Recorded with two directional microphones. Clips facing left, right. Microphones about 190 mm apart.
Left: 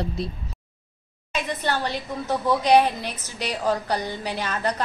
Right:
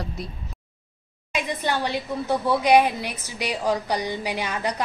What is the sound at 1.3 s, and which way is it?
A woman's voice, 10° right (ahead or behind).